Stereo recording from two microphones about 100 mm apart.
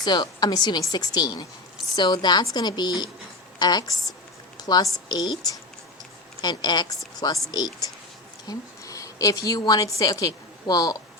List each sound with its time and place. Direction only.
0.0 s a woman's voice: 45° left (ahead or behind)
4.5 s a sound: 40° left (ahead or behind)
5.0 s a woman's voice: 40° left (ahead or behind)